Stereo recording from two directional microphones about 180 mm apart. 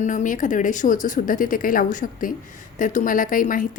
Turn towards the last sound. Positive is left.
turn(degrees=50)  # may be behind; listen again after turning